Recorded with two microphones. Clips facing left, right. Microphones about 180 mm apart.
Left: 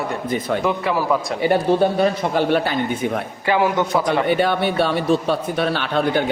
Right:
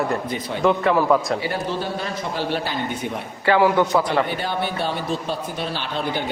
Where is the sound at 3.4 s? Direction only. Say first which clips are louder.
Right 2 dB; 15° left (ahead or behind).